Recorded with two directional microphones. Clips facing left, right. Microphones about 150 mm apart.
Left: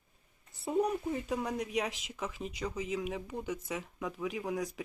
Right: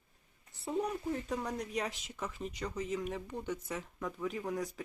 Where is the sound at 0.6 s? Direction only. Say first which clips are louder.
Left 4 dB; 10° left (ahead or behind).